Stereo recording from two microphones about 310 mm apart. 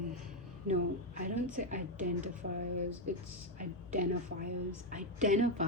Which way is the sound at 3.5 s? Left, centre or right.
Right.